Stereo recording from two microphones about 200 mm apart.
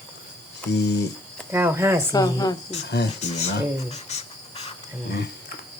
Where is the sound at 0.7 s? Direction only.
55° left (ahead or behind).